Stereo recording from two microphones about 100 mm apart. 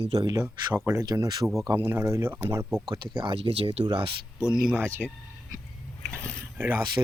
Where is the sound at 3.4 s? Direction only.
70° right (ahead or behind).